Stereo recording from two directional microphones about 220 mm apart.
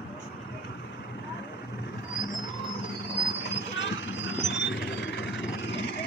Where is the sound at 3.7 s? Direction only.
55° left (ahead or behind).